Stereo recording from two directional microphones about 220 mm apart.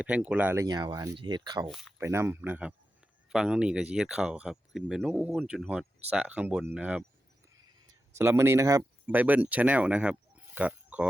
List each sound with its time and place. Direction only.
0.0 s speech: 5° right (ahead or behind)
8.2 s speech: 10° right (ahead or behind)